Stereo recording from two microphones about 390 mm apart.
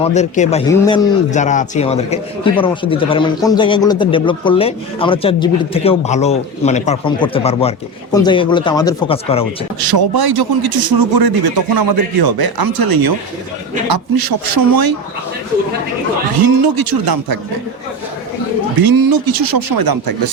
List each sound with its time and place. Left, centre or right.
0.0 s a man's voice: centre
9.8 s speech: right
16.6 s speech: right
18.8 s speech: right